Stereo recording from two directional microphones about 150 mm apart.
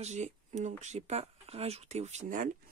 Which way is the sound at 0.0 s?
50° right (ahead or behind).